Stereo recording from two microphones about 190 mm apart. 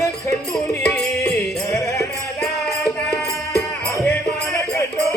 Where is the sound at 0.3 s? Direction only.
15° left (ahead or behind).